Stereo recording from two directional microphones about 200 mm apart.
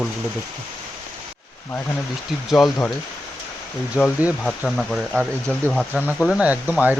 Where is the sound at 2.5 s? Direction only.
Centre (ahead or behind).